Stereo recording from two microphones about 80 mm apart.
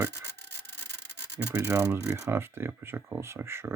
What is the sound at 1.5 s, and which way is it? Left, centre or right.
Speech, right.